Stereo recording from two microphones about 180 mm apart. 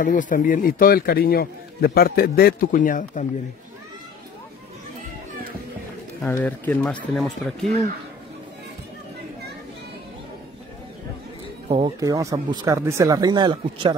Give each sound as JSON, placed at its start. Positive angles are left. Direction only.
{"t": 0.0, "sound": "a man's voice", "side_deg": 45}
{"t": 6.2, "sound": "speech", "side_deg": 10}
{"t": 11.7, "sound": "speech", "side_deg": -25}